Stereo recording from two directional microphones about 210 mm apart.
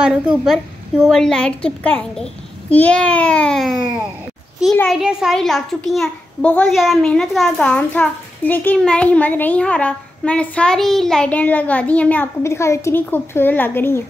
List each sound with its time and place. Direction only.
0.0 s a child's voice: 5° right (ahead or behind)